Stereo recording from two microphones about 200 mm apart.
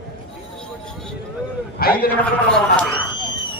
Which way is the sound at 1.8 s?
50° left (ahead or behind).